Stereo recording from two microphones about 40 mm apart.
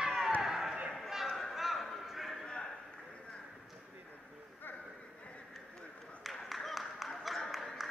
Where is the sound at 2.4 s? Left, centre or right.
Left.